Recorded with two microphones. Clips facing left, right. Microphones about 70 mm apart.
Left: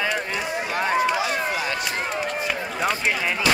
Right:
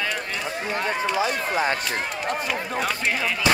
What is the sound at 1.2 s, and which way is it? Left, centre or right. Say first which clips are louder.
Run: right 1 dB; right.